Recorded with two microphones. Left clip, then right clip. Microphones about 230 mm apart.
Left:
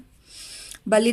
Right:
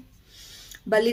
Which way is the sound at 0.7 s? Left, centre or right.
Left.